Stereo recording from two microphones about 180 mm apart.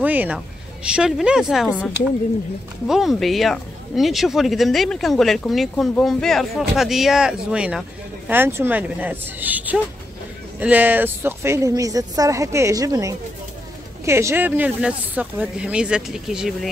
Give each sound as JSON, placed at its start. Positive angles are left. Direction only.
{"t": 0.0, "sound": "a woman's voice", "side_deg": -10}
{"t": 2.9, "sound": "a woman's voice", "side_deg": 0}